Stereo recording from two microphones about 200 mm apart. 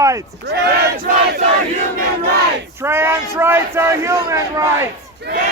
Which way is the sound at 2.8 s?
10° right (ahead or behind).